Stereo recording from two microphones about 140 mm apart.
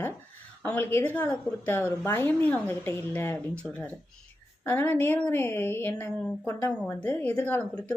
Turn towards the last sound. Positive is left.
turn(degrees=10)  # may be behind; listen again after turning